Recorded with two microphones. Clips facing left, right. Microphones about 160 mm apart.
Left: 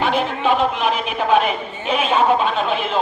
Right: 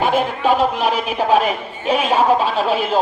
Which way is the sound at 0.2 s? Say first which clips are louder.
Right 2 dB; 40° right (ahead or behind).